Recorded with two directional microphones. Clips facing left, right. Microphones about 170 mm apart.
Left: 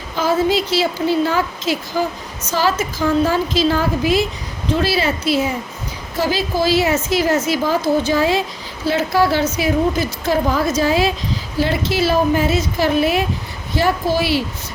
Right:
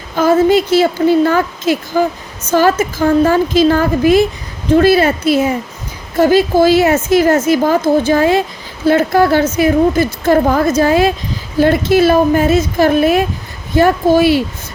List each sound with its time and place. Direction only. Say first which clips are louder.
0.2 s a woman's voice: right 7 dB; 50° right (ahead or behind)